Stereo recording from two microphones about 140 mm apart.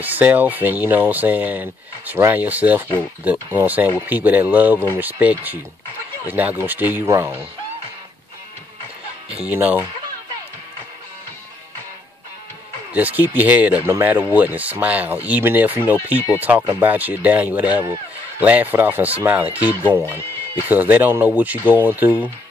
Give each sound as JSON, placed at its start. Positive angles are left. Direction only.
{"t": 0.0, "sound": "speech", "side_deg": -15}
{"t": 9.3, "sound": "speech", "side_deg": -10}
{"t": 12.9, "sound": "speech", "side_deg": -15}
{"t": 20.2, "sound": "music", "side_deg": 20}
{"t": 20.6, "sound": "speech", "side_deg": -10}